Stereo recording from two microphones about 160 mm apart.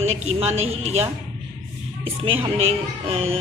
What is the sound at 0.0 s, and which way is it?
Speech, 40° right (ahead or behind).